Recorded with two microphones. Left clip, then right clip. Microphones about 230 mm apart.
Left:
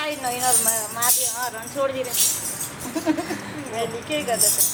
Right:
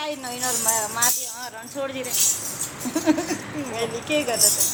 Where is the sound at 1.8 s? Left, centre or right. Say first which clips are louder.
Left 6 dB; right.